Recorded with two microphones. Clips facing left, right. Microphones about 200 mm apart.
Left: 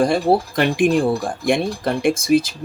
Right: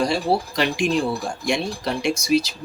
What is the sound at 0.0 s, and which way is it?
Speech, 55° left (ahead or behind).